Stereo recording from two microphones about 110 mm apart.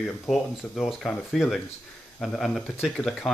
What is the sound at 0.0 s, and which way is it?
Speech, centre (ahead or behind).